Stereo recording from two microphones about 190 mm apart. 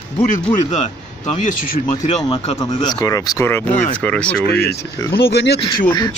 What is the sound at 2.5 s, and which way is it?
Speech, 20° left (ahead or behind).